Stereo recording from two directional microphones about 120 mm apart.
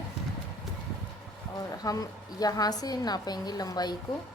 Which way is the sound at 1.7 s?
30° left (ahead or behind).